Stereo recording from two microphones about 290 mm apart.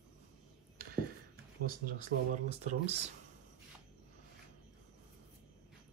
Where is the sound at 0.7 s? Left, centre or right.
Right.